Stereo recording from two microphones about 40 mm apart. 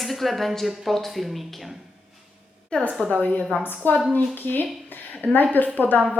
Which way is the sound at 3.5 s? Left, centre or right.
Left.